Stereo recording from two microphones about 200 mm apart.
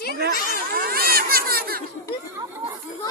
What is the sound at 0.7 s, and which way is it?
Speech, 50° right (ahead or behind).